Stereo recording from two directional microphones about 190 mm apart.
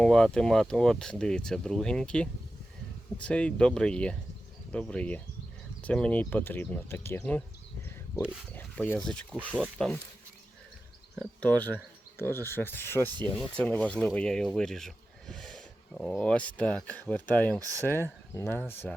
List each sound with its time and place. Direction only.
0.0 s speech: 5° left (ahead or behind)
8.5 s speech: 10° left (ahead or behind)
9.5 s speech: 10° right (ahead or behind)
11.2 s speech: 5° left (ahead or behind)
17.6 s speech: 15° right (ahead or behind)
17.8 s speech: 10° left (ahead or behind)